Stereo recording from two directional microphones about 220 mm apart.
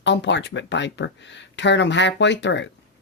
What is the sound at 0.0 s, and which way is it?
Speech, 55° left (ahead or behind).